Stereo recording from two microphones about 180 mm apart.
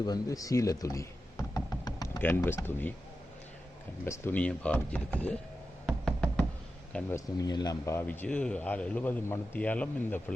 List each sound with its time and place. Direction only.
0.0 s music: 20° left (ahead or behind)
2.2 s a man's voice: 10° left (ahead or behind)
4.0 s a man's voice: 15° left (ahead or behind)
5.8 s music: centre (ahead or behind)
6.9 s a man's voice: 5° left (ahead or behind)
7.3 s a man's voice: 20° left (ahead or behind)